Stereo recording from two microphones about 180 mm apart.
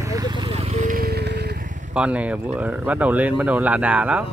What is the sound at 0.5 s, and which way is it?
Vehicle, 45° right (ahead or behind).